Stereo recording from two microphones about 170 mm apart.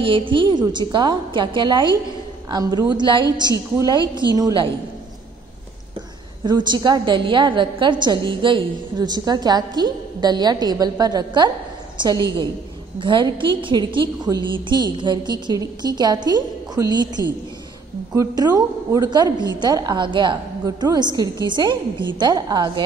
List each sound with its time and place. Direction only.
0.0 s a woman's voice: 30° right (ahead or behind)
6.4 s a woman's voice: 25° right (ahead or behind)
13.0 s a woman's voice: 30° right (ahead or behind)